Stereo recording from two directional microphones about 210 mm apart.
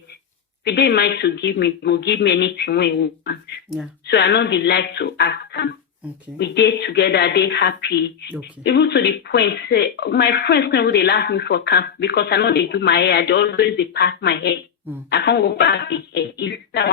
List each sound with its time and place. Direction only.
0.6 s speech: 50° left (ahead or behind)